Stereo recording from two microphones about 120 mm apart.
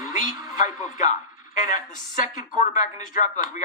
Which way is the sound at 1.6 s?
90° left.